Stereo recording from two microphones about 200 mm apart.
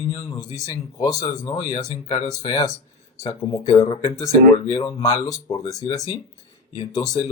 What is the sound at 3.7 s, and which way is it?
Speech, 15° left (ahead or behind).